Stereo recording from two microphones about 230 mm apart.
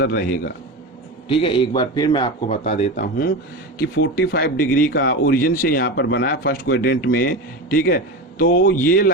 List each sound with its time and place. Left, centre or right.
0.0 s speech: left
1.3 s a man's voice: left
2.9 s speech: left